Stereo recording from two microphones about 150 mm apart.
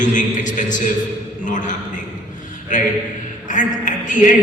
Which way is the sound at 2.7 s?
55° left (ahead or behind).